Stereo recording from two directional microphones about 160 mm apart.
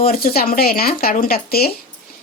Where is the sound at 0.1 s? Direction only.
65° left (ahead or behind).